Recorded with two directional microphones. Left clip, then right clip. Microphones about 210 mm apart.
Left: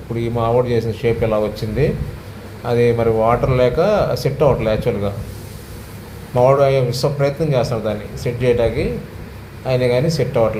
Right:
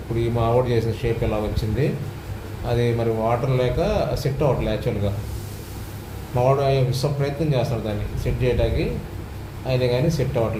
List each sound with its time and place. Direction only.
0.2 s a man's voice: 20° left (ahead or behind)
6.3 s a man's voice: 20° left (ahead or behind)